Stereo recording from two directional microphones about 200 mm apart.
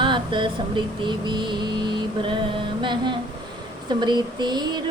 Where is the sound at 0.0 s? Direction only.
25° right (ahead or behind).